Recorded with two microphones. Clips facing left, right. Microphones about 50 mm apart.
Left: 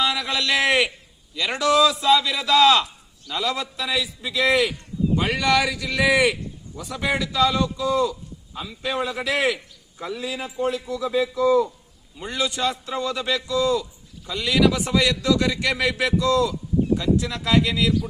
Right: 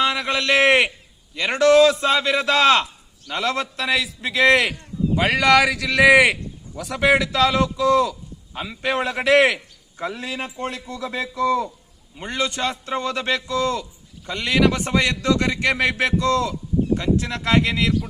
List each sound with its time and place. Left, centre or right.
0.0 s a sound: right
1.4 s a man's voice: right
8.5 s a man's voice: right
10.0 s a man's voice: right
12.1 s a man's voice: right